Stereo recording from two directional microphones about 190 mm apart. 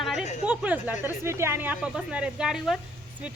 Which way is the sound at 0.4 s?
5° right (ahead or behind).